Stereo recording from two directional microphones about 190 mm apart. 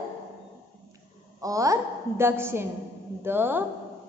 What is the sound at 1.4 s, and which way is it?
A woman's voice, 15° right (ahead or behind).